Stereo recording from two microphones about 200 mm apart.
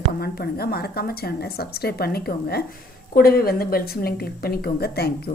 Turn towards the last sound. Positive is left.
turn(degrees=50)  # may be behind; listen again after turning